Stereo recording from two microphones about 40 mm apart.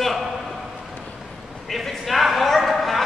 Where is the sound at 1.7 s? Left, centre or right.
Centre.